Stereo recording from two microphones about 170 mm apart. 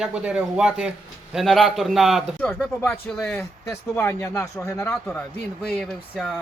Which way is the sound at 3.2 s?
15° left (ahead or behind).